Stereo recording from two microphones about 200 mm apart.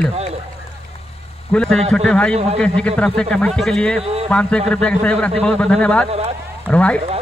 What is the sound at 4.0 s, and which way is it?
Speech, 30° right (ahead or behind).